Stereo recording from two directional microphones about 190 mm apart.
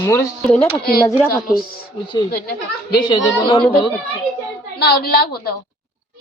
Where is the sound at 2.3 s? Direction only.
50° left (ahead or behind).